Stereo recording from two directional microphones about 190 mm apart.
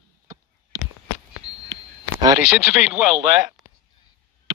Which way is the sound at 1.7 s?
20° right (ahead or behind).